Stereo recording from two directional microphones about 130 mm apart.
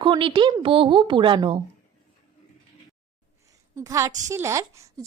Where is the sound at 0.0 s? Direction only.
40° right (ahead or behind).